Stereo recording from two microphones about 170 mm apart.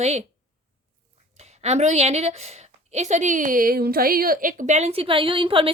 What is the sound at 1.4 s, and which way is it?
A woman's voice, 40° right (ahead or behind).